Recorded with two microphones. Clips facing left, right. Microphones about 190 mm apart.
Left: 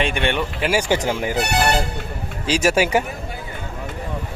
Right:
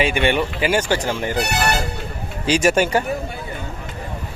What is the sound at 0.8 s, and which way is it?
Speech, 15° left (ahead or behind).